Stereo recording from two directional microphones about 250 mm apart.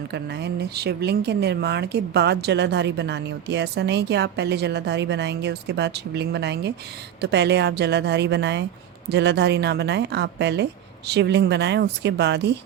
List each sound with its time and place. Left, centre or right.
0.1 s speech: right